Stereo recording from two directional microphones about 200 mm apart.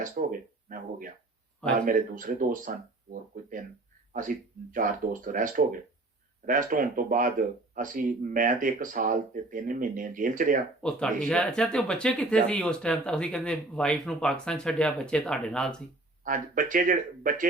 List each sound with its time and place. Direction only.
0.0 s speech: 45° right (ahead or behind)
10.8 s speech: 5° left (ahead or behind)
16.2 s speech: 40° right (ahead or behind)